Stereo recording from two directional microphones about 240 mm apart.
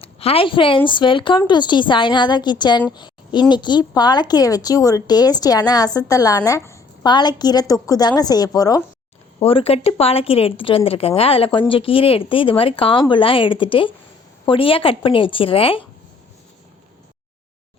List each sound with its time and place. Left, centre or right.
0.0 s a woman's voice: left
2.9 s a sound: centre
3.5 s speech: centre